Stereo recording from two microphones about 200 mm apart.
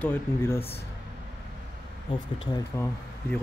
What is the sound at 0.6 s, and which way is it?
Speech, 30° left (ahead or behind).